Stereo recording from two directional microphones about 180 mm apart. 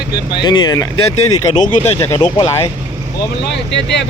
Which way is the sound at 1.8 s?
10° left (ahead or behind).